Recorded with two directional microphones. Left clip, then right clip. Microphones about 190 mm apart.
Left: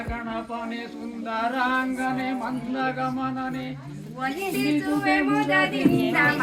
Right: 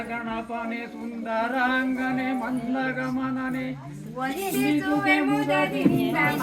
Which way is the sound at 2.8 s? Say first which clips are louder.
Left 3 dB; 45° right (ahead or behind).